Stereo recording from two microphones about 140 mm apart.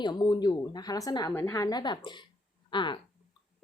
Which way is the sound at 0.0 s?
30° left (ahead or behind).